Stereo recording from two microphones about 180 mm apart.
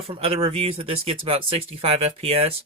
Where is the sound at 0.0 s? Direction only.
30° right (ahead or behind).